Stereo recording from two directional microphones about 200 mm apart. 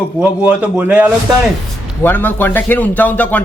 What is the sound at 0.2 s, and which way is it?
Speech, 5° right (ahead or behind).